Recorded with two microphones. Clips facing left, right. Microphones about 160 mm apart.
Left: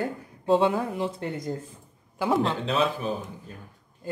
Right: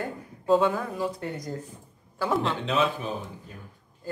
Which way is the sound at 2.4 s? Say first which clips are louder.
Left 1 dB; 35° left (ahead or behind).